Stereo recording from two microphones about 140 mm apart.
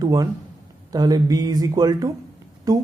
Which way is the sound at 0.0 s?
25° right (ahead or behind).